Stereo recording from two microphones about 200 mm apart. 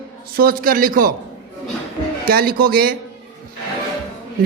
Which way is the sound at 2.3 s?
50° right (ahead or behind).